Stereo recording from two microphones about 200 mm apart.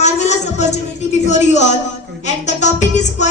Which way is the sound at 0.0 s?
35° left (ahead or behind).